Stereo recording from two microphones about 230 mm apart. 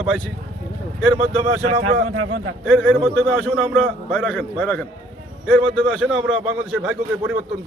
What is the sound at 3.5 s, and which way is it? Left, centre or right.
A man's voice, centre.